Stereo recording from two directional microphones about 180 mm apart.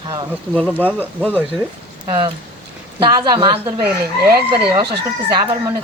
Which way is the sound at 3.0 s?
25° right (ahead or behind).